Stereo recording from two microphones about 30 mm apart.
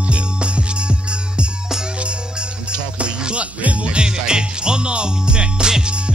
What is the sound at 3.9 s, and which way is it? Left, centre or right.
Music, right.